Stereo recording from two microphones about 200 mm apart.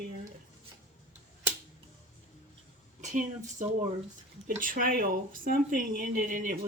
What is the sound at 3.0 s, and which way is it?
A woman's voice, 40° right (ahead or behind).